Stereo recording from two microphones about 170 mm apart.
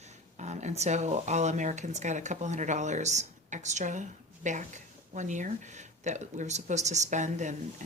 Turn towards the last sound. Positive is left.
turn(degrees=-45)  # may be behind; listen again after turning